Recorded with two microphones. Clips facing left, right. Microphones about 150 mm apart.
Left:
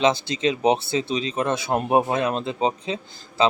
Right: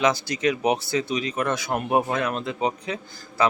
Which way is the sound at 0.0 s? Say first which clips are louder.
Left 1 dB; 25° left (ahead or behind).